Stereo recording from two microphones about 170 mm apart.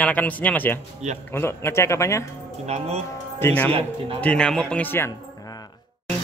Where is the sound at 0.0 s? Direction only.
10° left (ahead or behind).